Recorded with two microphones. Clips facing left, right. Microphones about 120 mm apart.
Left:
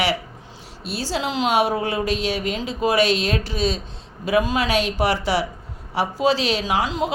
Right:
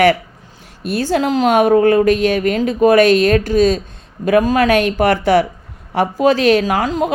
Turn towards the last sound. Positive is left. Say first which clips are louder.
# right 5 dB
turn(degrees=-50)  # may be behind; listen again after turning